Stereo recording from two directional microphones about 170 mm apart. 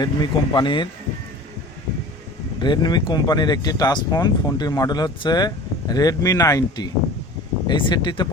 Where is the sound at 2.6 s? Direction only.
25° left (ahead or behind).